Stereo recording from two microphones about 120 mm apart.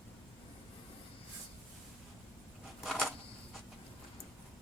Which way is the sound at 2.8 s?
Centre (ahead or behind).